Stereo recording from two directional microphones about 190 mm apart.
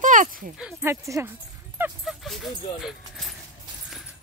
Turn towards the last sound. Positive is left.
turn(degrees=0)  # may be behind; listen again after turning